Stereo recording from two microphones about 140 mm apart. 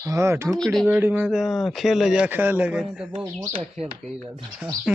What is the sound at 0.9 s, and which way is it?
Speech, 15° right (ahead or behind).